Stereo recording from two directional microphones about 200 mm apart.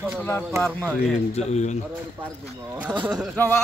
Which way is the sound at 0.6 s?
5° left (ahead or behind).